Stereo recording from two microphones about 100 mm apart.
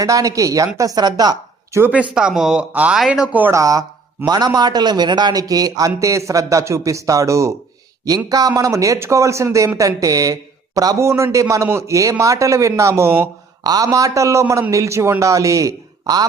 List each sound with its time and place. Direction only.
0.0 s speech: 35° right (ahead or behind)
1.9 s speech: 10° right (ahead or behind)
3.5 s speech: 35° right (ahead or behind)
13.7 s a man's voice: 35° right (ahead or behind)